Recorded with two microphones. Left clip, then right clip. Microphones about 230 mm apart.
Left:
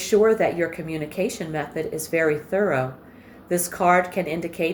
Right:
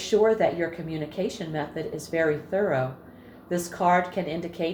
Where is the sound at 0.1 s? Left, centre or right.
Left.